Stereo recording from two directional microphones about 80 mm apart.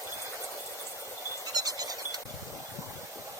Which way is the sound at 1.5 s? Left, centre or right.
Right.